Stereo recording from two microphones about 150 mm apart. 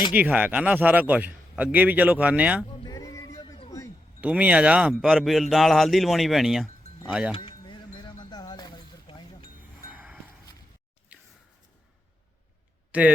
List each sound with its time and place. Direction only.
0.1 s a man's voice: 10° right (ahead or behind)
2.8 s music: 25° left (ahead or behind)
4.2 s a man's voice: 10° right (ahead or behind)
7.3 s a sound: 35° left (ahead or behind)
9.9 s a sound: 10° right (ahead or behind)
12.9 s speech: 10° right (ahead or behind)